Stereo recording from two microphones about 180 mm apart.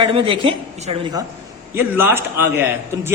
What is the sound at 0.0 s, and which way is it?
A woman's voice, 30° right (ahead or behind).